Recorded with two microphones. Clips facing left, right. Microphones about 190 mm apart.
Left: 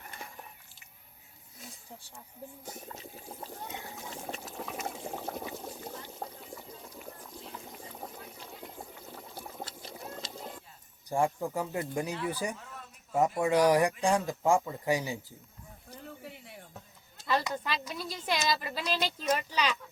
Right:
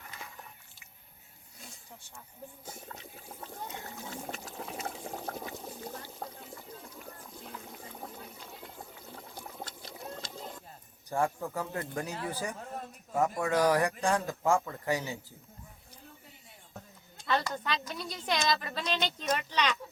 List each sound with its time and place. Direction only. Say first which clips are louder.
3.4 s water: right 1 dB; 20° left (ahead or behind)
4.3 s boiling: left 1 dB; centre (ahead or behind)
5.2 s water: left 1 dB; 10° left (ahead or behind)
9.4 s pour: left 2 dB; 10° left (ahead or behind)
11.1 s speech: left 2 dB; 15° left (ahead or behind)
12.5 s a sound: right 7 dB; 45° right (ahead or behind)
13.1 s speech: left 2 dB; 15° left (ahead or behind)
15.9 s a sound: left 9 dB; 75° left (ahead or behind)
17.2 s a woman's voice: left 1 dB; 5° left (ahead or behind)